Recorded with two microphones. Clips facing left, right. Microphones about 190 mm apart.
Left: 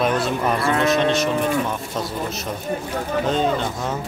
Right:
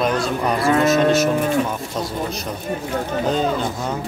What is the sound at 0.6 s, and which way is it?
Cattle, 35° right (ahead or behind).